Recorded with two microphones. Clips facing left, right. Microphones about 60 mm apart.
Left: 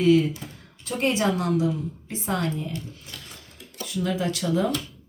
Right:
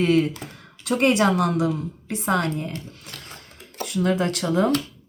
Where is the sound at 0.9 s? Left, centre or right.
Right.